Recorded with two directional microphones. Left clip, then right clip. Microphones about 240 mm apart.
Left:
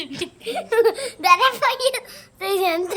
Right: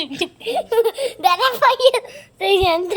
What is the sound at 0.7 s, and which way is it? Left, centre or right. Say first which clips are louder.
A child's voice: left 1 dB; right.